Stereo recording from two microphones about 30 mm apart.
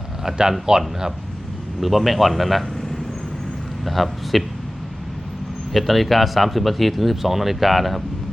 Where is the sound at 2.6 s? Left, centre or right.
Centre.